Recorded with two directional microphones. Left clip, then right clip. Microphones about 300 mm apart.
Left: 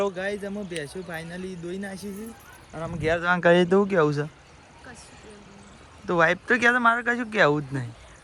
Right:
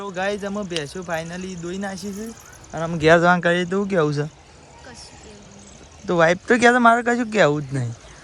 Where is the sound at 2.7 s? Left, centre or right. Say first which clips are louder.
Right 10 dB; right.